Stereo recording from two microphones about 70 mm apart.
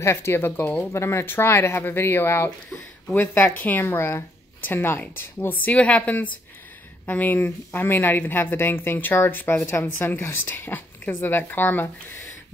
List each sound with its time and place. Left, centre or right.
0.0 s speech: left
5.7 s a woman's voice: centre